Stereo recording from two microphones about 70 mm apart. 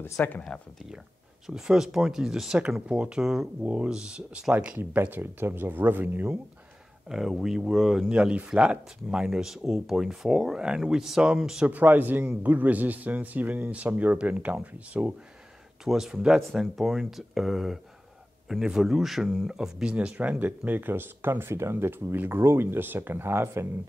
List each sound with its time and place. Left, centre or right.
0.0 s speech: left
1.5 s speech: centre
4.7 s speech: right
7.1 s speech: centre
8.1 s speech: centre
11.6 s speech: right
15.8 s speech: centre; by 23.7 s right